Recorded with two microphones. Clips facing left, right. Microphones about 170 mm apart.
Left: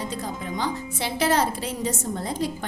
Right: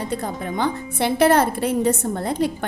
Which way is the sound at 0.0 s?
60° right (ahead or behind).